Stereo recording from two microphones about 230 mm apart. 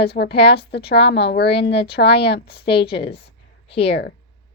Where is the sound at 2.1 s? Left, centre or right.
Left.